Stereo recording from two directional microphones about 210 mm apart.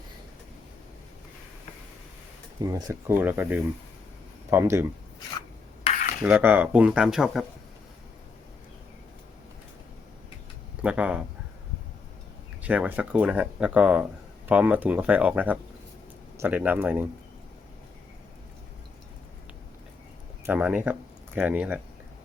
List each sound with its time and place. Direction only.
2.6 s speech: 20° right (ahead or behind)
5.8 s cutlery: 35° left (ahead or behind)
6.2 s speech: 10° right (ahead or behind)
10.8 s speech: 5° right (ahead or behind)
12.6 s speech: 5° right (ahead or behind)
20.4 s speech: 5° right (ahead or behind)